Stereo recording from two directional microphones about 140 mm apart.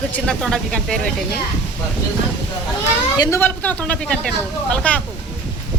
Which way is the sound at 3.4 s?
10° left (ahead or behind).